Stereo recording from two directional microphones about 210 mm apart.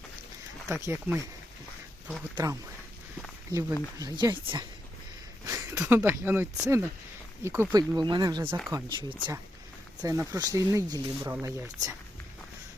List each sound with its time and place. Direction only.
0.7 s speech: 15° right (ahead or behind)
2.3 s speech: 15° right (ahead or behind)
5.7 s speech: 10° right (ahead or behind)